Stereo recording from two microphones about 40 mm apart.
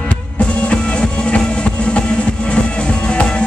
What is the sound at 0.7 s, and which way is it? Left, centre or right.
Music, left.